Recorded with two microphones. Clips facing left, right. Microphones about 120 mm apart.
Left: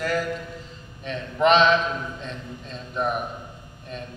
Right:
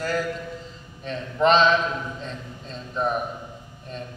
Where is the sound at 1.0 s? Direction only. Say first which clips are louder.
Even; 35° right (ahead or behind).